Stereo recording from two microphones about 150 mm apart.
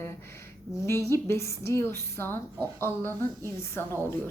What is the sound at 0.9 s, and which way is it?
A woman's voice, 15° left (ahead or behind).